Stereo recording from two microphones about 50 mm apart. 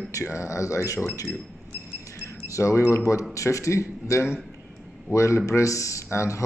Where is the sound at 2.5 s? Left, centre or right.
Left.